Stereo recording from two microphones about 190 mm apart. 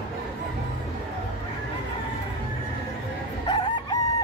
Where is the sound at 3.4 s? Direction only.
25° left (ahead or behind).